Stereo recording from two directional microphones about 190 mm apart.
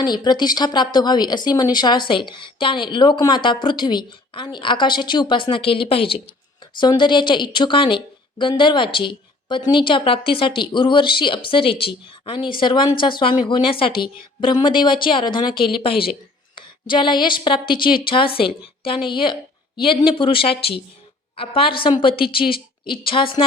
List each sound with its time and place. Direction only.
0.0 s a woman's voice: 20° left (ahead or behind)